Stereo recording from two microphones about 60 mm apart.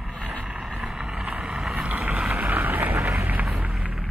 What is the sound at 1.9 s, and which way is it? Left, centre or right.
Vehicle, right.